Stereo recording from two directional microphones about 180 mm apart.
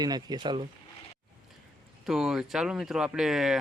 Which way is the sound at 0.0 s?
20° right (ahead or behind).